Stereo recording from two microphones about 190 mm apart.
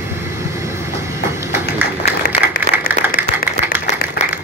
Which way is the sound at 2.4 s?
30° left (ahead or behind).